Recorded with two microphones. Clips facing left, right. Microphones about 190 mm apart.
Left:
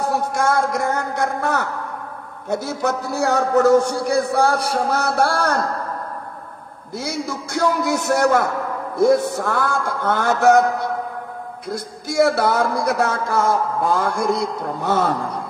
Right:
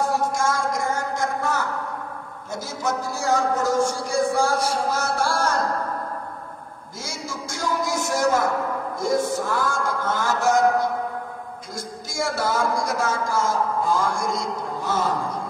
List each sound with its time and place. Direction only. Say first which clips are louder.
0.0 s a sound: left 2 dB; 65° left (ahead or behind)
2.5 s a man's voice: left 5 dB; 65° left (ahead or behind)
7.0 s a man's voice: left 7 dB; 65° left (ahead or behind)